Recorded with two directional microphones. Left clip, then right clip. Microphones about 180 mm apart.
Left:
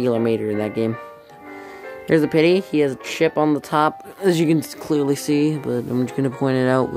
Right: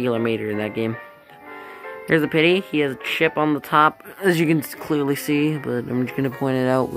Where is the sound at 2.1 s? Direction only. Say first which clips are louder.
Left 1 dB; 5° left (ahead or behind).